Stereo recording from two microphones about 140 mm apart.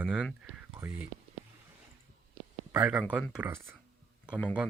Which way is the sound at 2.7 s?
10° right (ahead or behind).